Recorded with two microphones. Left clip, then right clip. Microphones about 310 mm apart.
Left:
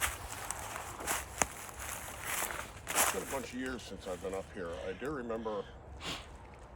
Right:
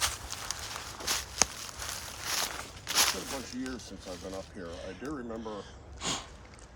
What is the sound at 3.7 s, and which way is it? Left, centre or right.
Speech, left.